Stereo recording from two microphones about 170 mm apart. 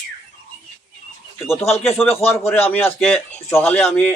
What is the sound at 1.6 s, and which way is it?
Speech, 35° left (ahead or behind).